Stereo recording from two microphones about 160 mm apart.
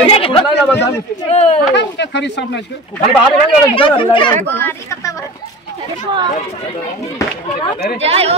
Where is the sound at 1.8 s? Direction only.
90° left.